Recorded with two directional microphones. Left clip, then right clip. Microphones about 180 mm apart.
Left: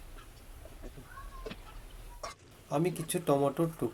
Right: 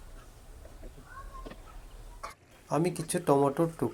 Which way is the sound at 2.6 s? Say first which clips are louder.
Right 2 dB; 10° right (ahead or behind).